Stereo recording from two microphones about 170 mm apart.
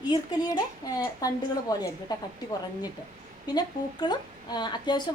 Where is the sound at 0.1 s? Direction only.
25° left (ahead or behind).